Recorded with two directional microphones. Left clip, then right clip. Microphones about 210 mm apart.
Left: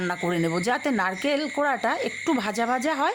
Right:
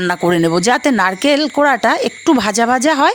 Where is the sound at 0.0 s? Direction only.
40° right (ahead or behind).